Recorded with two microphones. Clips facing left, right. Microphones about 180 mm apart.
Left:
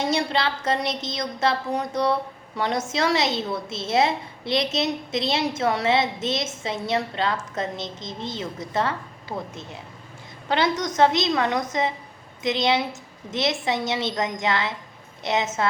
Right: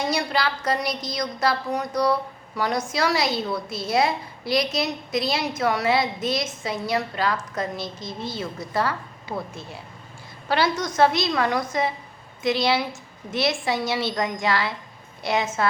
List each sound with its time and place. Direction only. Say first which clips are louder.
0.0 s a woman's voice: left 1 dB; 25° left (ahead or behind)